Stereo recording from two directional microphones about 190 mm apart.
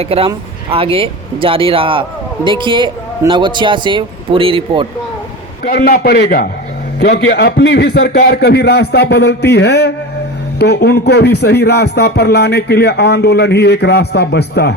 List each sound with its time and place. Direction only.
0.0 s speech: 30° right (ahead or behind)
5.6 s a man's voice: 50° left (ahead or behind)